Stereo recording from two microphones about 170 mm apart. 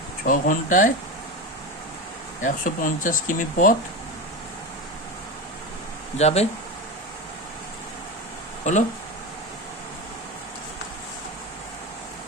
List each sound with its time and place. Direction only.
0.3 s speech: 50° left (ahead or behind)
2.4 s speech: 50° left (ahead or behind)
6.1 s speech: 40° left (ahead or behind)
8.7 s speech: 45° left (ahead or behind)